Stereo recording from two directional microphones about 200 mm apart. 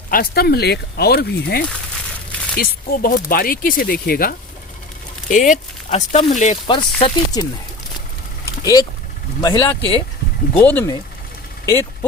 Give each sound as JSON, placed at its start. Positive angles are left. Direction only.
{"t": 0.1, "sound": "speech", "side_deg": 50}
{"t": 6.7, "sound": "speech", "side_deg": 25}
{"t": 8.6, "sound": "speech", "side_deg": 20}